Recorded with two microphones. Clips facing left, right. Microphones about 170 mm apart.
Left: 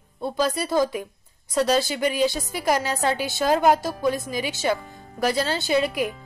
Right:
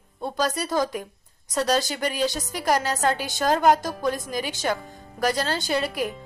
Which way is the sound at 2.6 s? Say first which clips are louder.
Even; 10° left (ahead or behind).